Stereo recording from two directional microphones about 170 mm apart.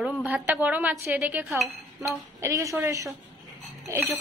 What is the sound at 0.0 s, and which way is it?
A woman's voice, 5° right (ahead or behind).